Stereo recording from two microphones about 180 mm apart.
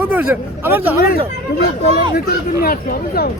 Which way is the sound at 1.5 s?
60° left (ahead or behind).